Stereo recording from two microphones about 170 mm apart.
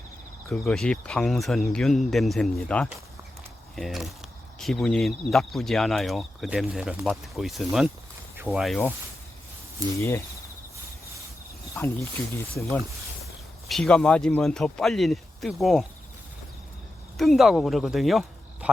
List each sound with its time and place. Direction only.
0.4 s speech: 5° left (ahead or behind)
10.0 s speech: 15° left (ahead or behind)
11.8 s speech: 10° left (ahead or behind)
13.7 s speech: 5° left (ahead or behind)
17.2 s speech: centre (ahead or behind)